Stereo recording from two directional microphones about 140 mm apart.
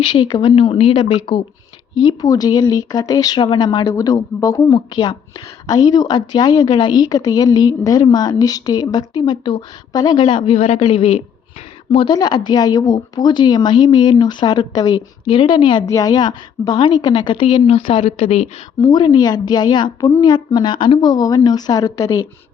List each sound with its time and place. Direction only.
0.0 s speech: 40° left (ahead or behind)
2.0 s a woman's voice: 25° left (ahead or behind); by 11.2 s 45° left (ahead or behind)
11.9 s a woman's voice: 35° left (ahead or behind); by 18.4 s 50° left (ahead or behind)
18.8 s a woman's voice: 30° left (ahead or behind)